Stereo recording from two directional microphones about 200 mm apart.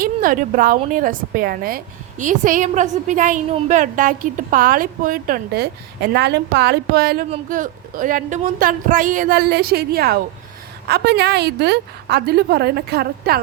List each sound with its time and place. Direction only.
0.0 s a woman's voice: 45° right (ahead or behind)